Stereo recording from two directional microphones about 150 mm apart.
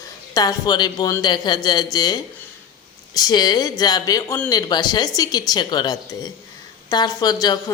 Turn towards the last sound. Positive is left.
turn(degrees=25)  # may be behind; listen again after turning